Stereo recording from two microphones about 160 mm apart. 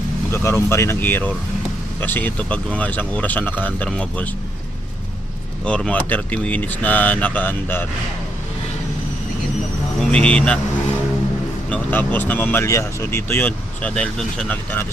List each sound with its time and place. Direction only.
0.3 s speech: 15° left (ahead or behind)
5.6 s speech: 5° left (ahead or behind)
10.0 s speech: 5° left (ahead or behind)
11.7 s speech: 10° left (ahead or behind)